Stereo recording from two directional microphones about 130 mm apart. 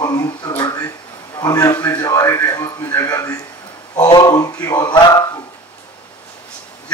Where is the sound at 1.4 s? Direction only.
30° left (ahead or behind).